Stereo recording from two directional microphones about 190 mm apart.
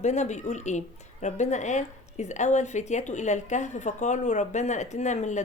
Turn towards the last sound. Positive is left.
turn(degrees=40)  # may be behind; listen again after turning